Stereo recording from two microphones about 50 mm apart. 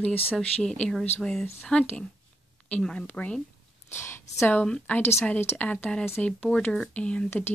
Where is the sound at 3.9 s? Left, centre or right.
Left.